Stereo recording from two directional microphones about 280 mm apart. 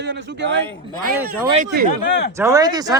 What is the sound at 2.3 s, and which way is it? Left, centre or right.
Speech, centre.